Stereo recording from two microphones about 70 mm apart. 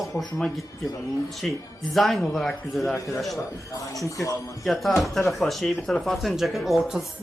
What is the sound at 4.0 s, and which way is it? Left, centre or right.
Speech, left.